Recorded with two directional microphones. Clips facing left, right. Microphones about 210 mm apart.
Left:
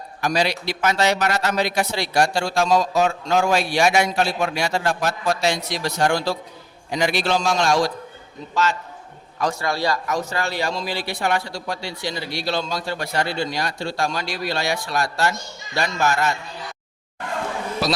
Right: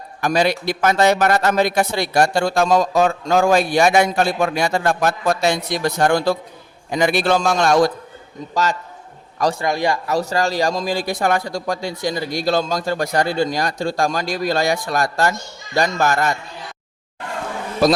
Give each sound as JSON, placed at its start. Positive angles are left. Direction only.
{"t": 0.2, "sound": "a man's voice", "side_deg": -50}
{"t": 9.4, "sound": "a man's voice", "side_deg": -35}
{"t": 9.6, "sound": "speech", "side_deg": -20}
{"t": 10.1, "sound": "a man's voice", "side_deg": -35}
{"t": 17.8, "sound": "a man's voice", "side_deg": -50}